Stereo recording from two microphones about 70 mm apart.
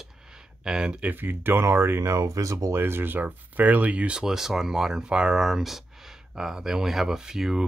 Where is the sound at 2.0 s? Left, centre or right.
Right.